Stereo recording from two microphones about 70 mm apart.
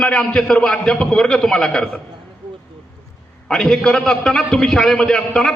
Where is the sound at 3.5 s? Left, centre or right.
Centre.